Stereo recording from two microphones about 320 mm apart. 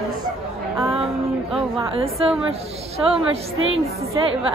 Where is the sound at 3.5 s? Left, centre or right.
Right.